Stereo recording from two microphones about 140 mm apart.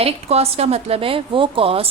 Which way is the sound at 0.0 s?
45° right (ahead or behind).